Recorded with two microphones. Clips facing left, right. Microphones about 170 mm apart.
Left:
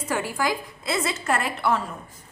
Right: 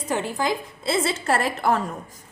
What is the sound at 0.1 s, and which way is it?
A woman's voice, 20° right (ahead or behind).